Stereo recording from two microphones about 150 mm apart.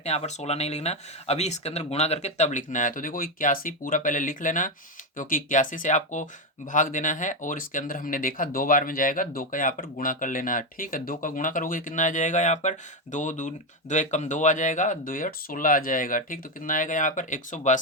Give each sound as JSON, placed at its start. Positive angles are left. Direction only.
{"t": 0.0, "sound": "speech", "side_deg": 45}